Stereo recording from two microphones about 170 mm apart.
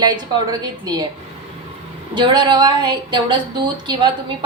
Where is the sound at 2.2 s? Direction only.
25° right (ahead or behind).